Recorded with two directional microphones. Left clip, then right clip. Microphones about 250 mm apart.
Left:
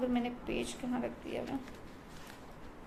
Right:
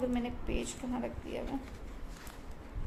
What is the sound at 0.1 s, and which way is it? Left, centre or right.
A woman's voice, centre.